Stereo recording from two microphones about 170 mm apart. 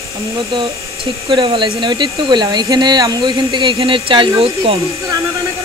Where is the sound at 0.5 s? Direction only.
35° right (ahead or behind).